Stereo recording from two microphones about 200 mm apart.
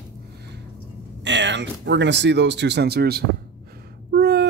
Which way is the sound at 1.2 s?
60° right (ahead or behind).